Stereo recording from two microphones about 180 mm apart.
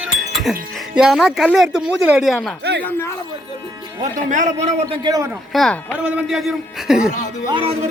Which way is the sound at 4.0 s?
45° right (ahead or behind).